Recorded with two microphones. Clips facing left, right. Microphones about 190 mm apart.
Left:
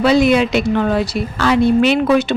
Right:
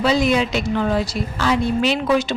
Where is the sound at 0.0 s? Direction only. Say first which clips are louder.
Left 5 dB; 65° left (ahead or behind).